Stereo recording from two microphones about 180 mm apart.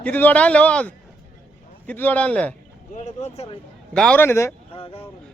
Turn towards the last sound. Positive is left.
turn(degrees=30)  # may be behind; listen again after turning